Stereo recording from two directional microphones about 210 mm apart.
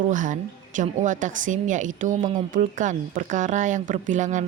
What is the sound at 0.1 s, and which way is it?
A woman's voice, 35° right (ahead or behind).